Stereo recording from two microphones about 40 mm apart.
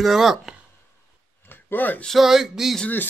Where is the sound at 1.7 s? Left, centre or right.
Left.